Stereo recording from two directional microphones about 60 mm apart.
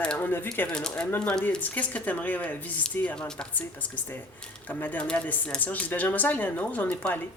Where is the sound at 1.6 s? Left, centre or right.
Left.